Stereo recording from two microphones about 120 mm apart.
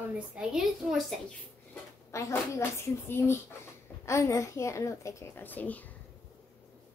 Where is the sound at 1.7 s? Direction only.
25° left (ahead or behind).